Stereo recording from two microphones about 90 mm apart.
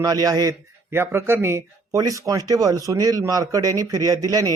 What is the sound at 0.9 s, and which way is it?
Speech, 25° right (ahead or behind).